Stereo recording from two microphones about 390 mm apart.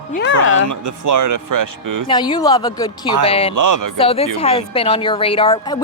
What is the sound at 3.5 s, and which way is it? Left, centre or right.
Speech, right.